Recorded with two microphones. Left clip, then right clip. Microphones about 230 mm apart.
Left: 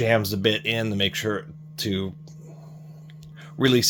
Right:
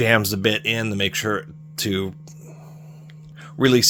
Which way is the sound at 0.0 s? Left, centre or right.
Right.